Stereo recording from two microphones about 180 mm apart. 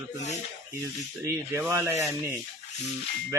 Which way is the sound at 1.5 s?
15° right (ahead or behind).